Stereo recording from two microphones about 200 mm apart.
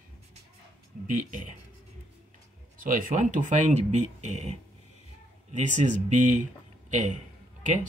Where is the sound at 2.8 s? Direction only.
45° right (ahead or behind).